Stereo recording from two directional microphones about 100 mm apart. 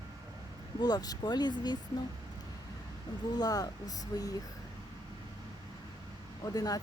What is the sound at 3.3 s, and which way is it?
Speech, 40° left (ahead or behind).